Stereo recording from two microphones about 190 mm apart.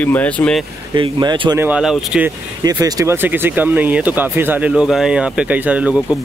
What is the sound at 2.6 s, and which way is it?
Speech, 20° right (ahead or behind).